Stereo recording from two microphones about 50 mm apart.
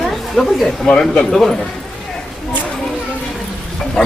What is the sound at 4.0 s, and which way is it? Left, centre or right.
Speech, centre.